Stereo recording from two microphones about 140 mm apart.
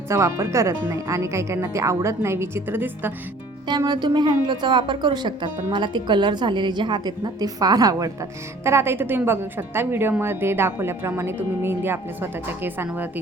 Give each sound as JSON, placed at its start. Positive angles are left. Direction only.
{"t": 0.1, "sound": "a woman's voice", "side_deg": -20}
{"t": 3.7, "sound": "a woman's voice", "side_deg": -30}